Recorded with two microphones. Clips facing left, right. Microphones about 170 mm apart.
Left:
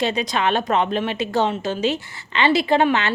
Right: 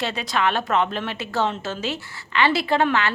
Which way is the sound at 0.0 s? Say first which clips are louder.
Left 3 dB; 20° left (ahead or behind).